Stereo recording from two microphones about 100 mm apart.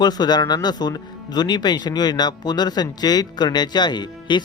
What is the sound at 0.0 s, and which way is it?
Speech, 45° left (ahead or behind).